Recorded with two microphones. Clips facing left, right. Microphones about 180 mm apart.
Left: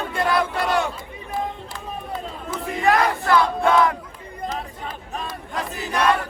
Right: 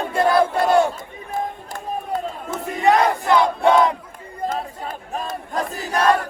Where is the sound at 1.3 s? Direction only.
50° right (ahead or behind).